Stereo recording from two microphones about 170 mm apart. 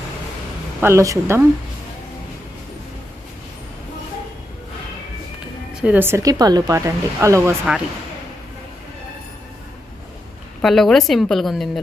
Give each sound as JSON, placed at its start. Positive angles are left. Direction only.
{"t": 0.8, "sound": "speech", "side_deg": -15}
{"t": 5.8, "sound": "speech", "side_deg": -10}
{"t": 10.6, "sound": "a woman's voice", "side_deg": 0}